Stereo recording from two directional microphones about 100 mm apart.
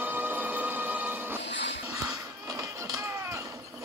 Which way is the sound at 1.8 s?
35° right (ahead or behind).